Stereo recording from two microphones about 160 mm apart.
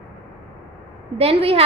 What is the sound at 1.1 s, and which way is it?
Speech, 40° right (ahead or behind).